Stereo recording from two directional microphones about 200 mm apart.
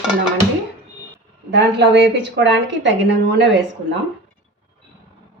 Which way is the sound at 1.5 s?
60° right (ahead or behind).